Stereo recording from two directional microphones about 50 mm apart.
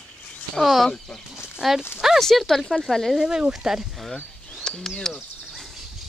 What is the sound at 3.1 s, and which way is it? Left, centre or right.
Speech, centre.